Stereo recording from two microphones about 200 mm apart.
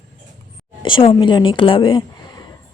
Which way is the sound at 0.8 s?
25° left (ahead or behind).